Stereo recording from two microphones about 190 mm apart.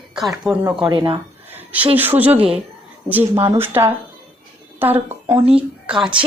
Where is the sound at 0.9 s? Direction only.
25° right (ahead or behind).